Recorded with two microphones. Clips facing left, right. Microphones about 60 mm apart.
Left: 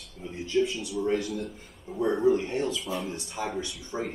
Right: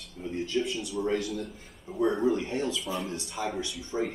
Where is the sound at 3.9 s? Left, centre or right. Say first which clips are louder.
Right 2 dB; left.